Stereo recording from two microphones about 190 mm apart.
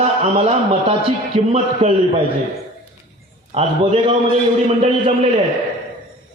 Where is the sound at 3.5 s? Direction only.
30° right (ahead or behind).